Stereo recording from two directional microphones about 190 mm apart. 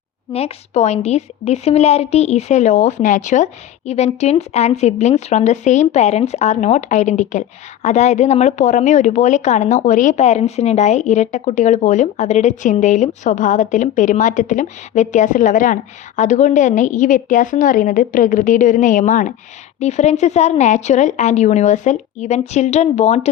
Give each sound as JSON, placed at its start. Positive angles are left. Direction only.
{"t": 0.3, "sound": "a woman's voice", "side_deg": 35}